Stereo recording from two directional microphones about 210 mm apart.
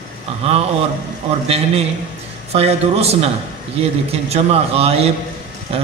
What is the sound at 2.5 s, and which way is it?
A man's voice, 30° right (ahead or behind).